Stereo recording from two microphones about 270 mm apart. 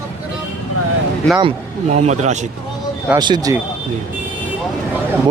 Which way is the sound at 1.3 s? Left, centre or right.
Right.